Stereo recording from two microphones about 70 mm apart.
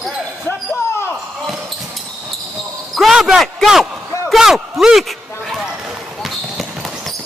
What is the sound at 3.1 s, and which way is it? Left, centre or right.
Speech, centre.